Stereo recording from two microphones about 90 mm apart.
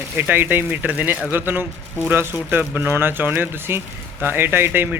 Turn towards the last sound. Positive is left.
turn(degrees=-25)  # may be behind; listen again after turning